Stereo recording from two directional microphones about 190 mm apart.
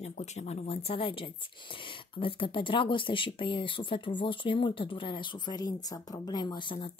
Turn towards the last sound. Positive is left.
turn(degrees=25)  # may be behind; listen again after turning